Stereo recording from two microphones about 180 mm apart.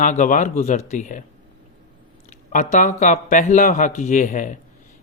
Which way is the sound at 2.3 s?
45° left (ahead or behind).